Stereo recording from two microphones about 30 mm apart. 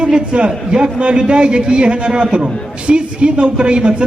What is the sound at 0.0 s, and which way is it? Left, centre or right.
A man's voice, right.